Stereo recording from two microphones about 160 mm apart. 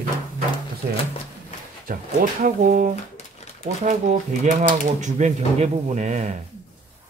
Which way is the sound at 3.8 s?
50° right (ahead or behind).